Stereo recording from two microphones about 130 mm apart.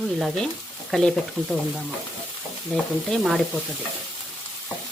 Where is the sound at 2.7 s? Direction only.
5° left (ahead or behind).